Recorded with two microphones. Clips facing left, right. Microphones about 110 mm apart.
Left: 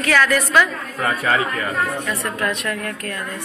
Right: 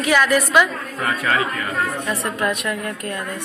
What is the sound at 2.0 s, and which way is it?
A woman's voice, 20° right (ahead or behind).